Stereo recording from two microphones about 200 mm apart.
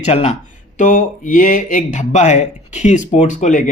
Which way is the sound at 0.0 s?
35° left (ahead or behind).